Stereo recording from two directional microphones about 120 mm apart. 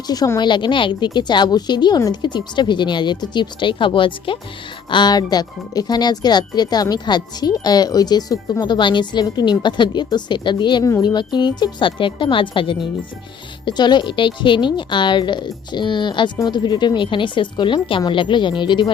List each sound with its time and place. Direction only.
0.3 s speech: 40° left (ahead or behind)